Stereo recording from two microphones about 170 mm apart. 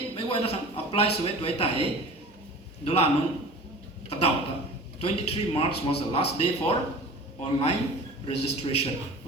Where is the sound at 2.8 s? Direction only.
35° left (ahead or behind).